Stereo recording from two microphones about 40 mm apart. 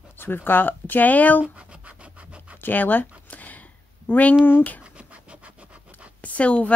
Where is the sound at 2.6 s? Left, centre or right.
Left.